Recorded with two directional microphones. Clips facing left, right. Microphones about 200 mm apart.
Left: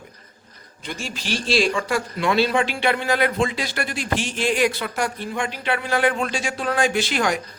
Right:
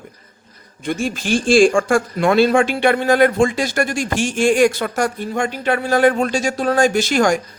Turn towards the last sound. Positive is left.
turn(degrees=-45)  # may be behind; listen again after turning